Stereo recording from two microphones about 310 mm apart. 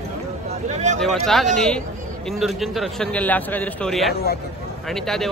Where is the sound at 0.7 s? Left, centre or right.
Right.